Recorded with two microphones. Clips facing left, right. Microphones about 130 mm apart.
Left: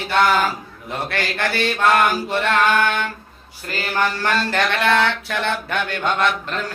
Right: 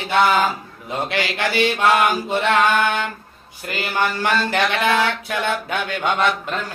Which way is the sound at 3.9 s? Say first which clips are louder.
Even; 15° right (ahead or behind).